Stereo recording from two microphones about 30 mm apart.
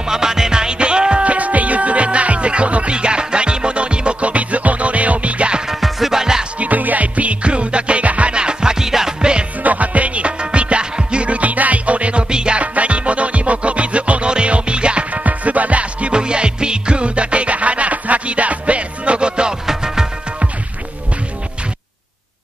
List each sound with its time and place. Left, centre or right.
0.1 s music: centre; by 1.2 s right
1.2 s music: right
5.7 s music: centre
6.1 s music: centre
6.6 s music: right
8.3 s music: right; by 9.1 s centre
9.2 s music: right
9.6 s music: right
12.5 s music: right
14.2 s music: right
15.2 s music: right
16.1 s music: right